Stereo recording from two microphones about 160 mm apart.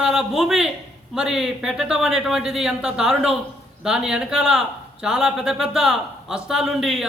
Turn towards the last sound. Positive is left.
turn(degrees=0)  # may be behind; listen again after turning